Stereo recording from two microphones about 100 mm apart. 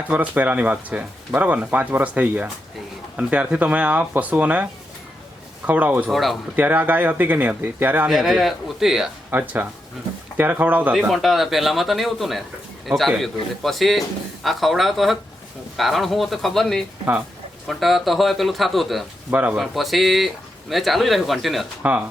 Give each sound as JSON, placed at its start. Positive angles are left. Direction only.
{"t": 0.1, "sound": "speech", "side_deg": -15}
{"t": 6.1, "sound": "speech", "side_deg": 0}
{"t": 6.6, "sound": "speech", "side_deg": -15}
{"t": 8.0, "sound": "speech", "side_deg": -5}
{"t": 9.3, "sound": "speech", "side_deg": -20}
{"t": 11.1, "sound": "speech", "side_deg": 0}
{"t": 19.3, "sound": "speech", "side_deg": -15}
{"t": 19.5, "sound": "speech", "side_deg": 0}